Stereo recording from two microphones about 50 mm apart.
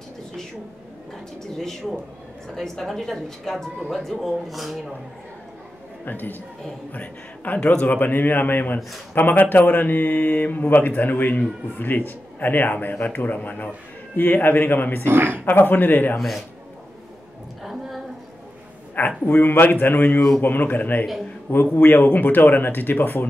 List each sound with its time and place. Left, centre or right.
1.6 s a woman's voice: centre
6.0 s a man's voice: left
7.9 s speech: left
15.0 s speech: right
15.4 s speech: left
16.2 s speech: centre
17.6 s a sound: centre
18.9 s a man's voice: left
21.8 s speech: left